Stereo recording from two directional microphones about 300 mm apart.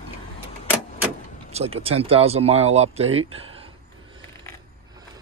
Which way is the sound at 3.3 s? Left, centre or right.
Centre.